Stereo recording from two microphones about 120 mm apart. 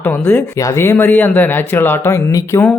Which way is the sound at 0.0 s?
15° left (ahead or behind).